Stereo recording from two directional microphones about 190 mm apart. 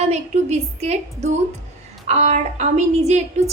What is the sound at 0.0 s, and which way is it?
A woman's voice, 35° right (ahead or behind).